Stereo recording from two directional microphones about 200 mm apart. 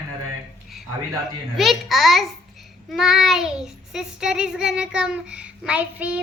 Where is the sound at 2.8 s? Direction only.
Centre (ahead or behind).